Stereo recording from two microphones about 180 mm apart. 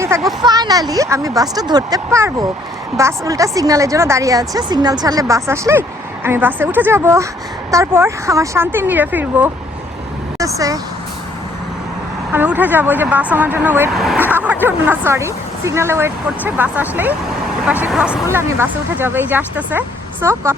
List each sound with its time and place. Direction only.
0.3 s a woman's voice: 20° right (ahead or behind)
12.3 s speech: 10° right (ahead or behind)
13.9 s speech: centre (ahead or behind)